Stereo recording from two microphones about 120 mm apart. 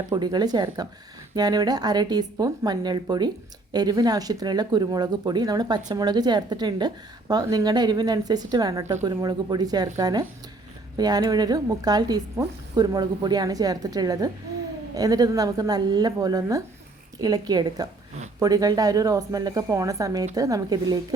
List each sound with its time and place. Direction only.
0.1 s speech: 35° right (ahead or behind)
8.8 s a woman's voice: 20° right (ahead or behind)
9.0 s speech: 35° right (ahead or behind)